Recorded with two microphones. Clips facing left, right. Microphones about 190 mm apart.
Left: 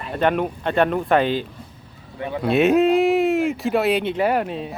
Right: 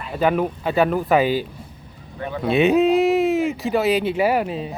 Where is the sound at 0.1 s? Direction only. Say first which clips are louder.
Right 1 dB; 5° right (ahead or behind).